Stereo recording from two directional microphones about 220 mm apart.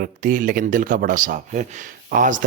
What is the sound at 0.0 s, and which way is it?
Speech, 40° right (ahead or behind).